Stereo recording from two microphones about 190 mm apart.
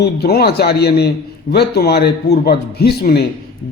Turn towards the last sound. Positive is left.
turn(degrees=55)  # may be behind; listen again after turning